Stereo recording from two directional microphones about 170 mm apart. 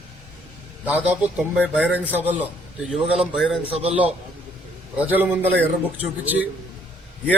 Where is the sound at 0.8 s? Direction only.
10° right (ahead or behind).